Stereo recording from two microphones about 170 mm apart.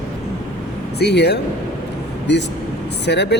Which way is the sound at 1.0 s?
75° left (ahead or behind).